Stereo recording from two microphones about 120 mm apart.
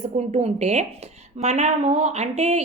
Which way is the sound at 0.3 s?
65° right (ahead or behind).